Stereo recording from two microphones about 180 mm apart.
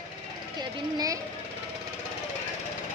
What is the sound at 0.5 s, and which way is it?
Speech, 20° right (ahead or behind).